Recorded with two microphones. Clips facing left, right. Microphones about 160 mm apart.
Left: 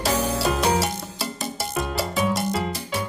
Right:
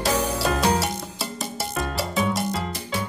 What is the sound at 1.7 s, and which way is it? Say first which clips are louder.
Music: even; centre (ahead or behind).